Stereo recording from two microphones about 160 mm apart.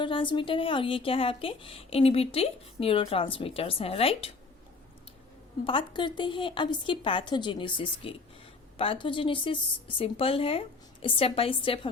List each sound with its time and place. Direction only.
0.0 s a woman's voice: 30° left (ahead or behind)
5.6 s a woman's voice: 30° left (ahead or behind)